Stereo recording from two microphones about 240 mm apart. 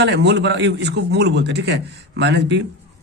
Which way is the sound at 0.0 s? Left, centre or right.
Right.